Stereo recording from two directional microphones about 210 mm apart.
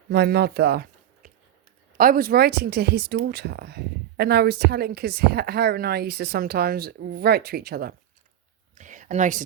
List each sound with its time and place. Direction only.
0.1 s speech: 50° right (ahead or behind)
8.8 s whispering: 35° right (ahead or behind)